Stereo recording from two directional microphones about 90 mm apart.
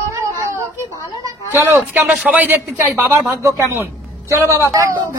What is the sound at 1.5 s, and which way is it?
Speech, 25° right (ahead or behind).